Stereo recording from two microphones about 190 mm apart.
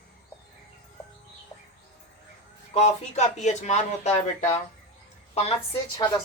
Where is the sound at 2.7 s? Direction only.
35° left (ahead or behind).